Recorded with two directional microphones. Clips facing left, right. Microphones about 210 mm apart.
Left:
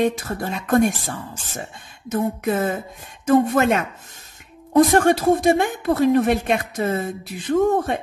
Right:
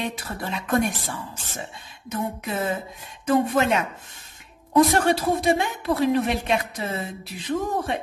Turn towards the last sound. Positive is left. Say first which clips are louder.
# left 7 dB
turn(degrees=50)  # may be behind; listen again after turning